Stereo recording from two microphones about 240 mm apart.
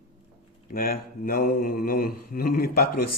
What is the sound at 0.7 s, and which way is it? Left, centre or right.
Speech, left.